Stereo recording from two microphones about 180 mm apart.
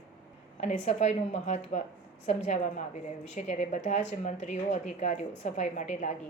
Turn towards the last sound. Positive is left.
turn(degrees=40)  # may be behind; listen again after turning